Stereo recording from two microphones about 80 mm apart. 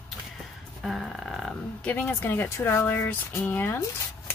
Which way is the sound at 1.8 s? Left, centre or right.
Left.